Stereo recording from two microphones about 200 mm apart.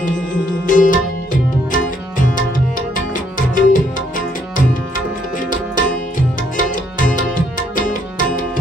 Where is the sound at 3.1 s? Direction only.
40° left (ahead or behind).